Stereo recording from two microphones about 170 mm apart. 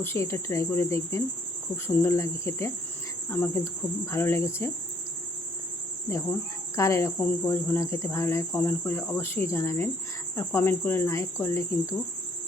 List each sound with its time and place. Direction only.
0.0 s speech: 15° left (ahead or behind)
6.7 s speech: 15° left (ahead or behind)